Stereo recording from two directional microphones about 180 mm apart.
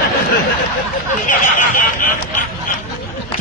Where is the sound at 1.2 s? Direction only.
45° left (ahead or behind).